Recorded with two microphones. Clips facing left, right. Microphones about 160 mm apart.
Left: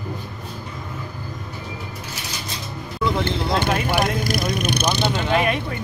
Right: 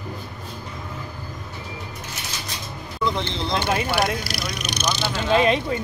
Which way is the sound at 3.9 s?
50° left (ahead or behind).